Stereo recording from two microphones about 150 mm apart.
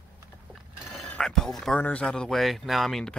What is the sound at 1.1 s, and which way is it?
Speech, 5° left (ahead or behind).